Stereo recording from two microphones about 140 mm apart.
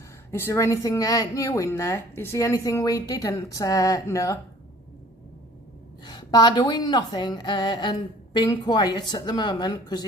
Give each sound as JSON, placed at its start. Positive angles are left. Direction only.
{"t": 0.3, "sound": "speech", "side_deg": 20}
{"t": 6.1, "sound": "a woman's voice", "side_deg": 30}